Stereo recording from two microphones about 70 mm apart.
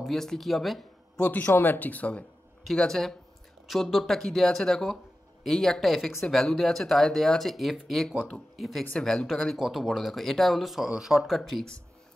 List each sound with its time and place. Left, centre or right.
0.0 s speech: centre
1.1 s speech: left
2.6 s speech: centre